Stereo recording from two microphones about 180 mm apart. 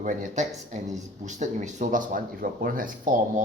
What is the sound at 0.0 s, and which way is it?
Speech, 45° right (ahead or behind).